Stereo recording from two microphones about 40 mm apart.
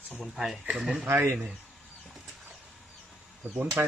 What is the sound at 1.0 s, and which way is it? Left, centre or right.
Speech, right.